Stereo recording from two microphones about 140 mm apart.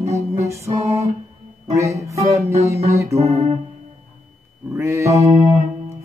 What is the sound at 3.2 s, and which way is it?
Speech, 50° right (ahead or behind).